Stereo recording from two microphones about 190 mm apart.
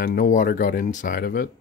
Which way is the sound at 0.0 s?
45° left (ahead or behind).